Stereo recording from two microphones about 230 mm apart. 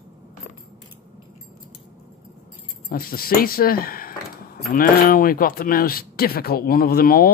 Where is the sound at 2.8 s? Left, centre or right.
Left.